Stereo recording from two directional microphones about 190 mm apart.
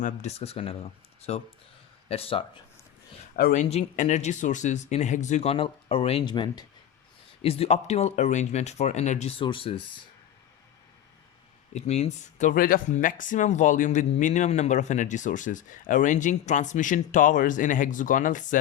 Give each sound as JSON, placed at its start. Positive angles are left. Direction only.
{"t": 0.0, "sound": "speech", "side_deg": 35}
{"t": 3.3, "sound": "speech", "side_deg": 45}
{"t": 11.7, "sound": "speech", "side_deg": 35}